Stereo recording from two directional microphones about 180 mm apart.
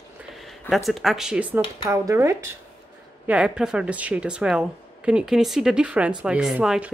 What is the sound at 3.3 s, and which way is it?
Speech, 5° right (ahead or behind).